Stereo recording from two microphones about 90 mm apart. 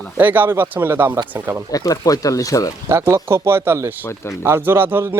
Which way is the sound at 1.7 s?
40° left (ahead or behind).